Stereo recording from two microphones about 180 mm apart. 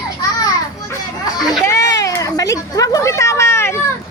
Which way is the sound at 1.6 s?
15° left (ahead or behind).